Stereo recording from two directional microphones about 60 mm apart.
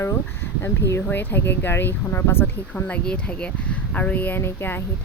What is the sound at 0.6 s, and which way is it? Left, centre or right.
Speech, left.